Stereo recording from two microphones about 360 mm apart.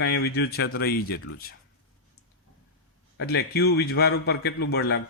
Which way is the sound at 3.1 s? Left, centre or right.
Left.